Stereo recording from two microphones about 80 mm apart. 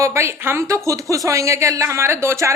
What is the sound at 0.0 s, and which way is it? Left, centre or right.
A woman's voice, right.